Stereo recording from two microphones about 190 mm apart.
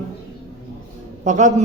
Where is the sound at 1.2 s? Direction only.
40° right (ahead or behind).